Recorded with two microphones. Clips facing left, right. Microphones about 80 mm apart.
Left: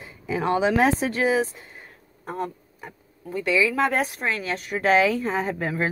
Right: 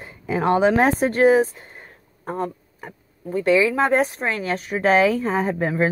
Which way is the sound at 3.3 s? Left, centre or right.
Right.